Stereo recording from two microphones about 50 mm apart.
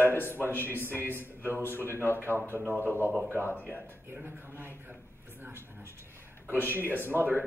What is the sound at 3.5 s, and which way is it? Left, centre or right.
Speech, left.